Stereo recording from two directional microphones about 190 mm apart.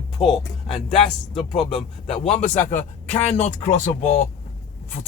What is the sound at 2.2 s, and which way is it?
Speech, 40° left (ahead or behind).